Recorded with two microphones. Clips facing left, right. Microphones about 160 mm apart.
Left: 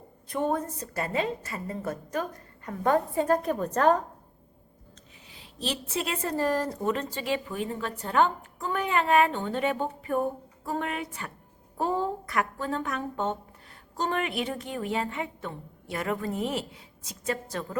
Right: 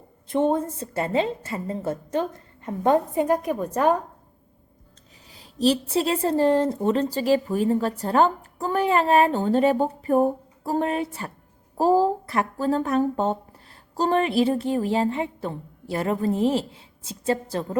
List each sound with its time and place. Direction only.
0.3 s a woman's voice: 25° right (ahead or behind)
5.3 s a woman's voice: 40° right (ahead or behind)